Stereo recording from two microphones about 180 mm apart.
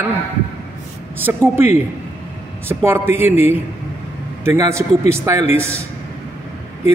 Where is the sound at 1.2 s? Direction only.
10° right (ahead or behind).